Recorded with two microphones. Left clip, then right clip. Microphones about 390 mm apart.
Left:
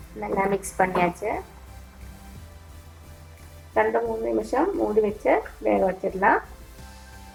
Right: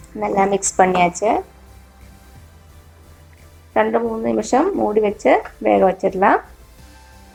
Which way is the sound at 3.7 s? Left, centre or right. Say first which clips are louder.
Right 5 dB; right.